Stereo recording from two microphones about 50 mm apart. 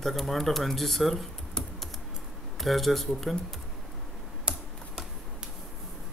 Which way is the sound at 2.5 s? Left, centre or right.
Centre.